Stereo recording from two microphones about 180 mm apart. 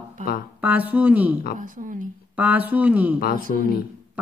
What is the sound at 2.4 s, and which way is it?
Speech, 10° right (ahead or behind).